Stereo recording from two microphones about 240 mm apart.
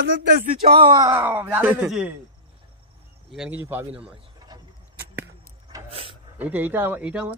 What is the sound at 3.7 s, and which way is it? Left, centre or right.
Speech, centre.